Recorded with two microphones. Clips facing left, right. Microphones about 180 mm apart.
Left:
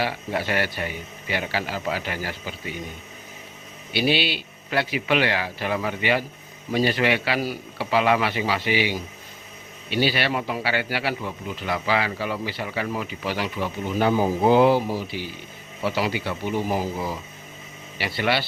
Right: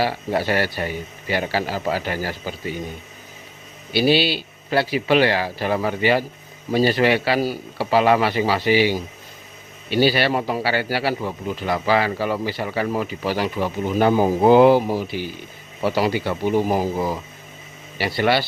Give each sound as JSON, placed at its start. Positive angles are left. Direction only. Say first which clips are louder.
{"t": 0.0, "sound": "a man's voice", "louder": "right 5 dB", "side_deg": -35}
{"t": 3.9, "sound": "a man's voice", "louder": "right 5 dB", "side_deg": -35}